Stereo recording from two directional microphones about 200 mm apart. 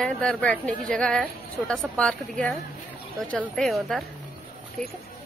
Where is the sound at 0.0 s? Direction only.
5° left (ahead or behind).